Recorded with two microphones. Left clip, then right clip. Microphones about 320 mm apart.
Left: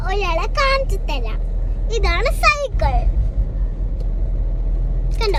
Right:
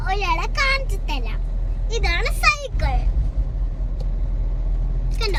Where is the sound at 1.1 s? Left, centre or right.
Centre.